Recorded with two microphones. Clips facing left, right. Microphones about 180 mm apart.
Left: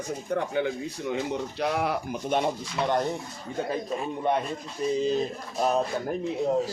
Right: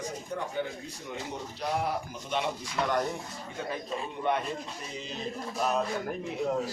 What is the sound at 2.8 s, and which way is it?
Speech, 25° left (ahead or behind).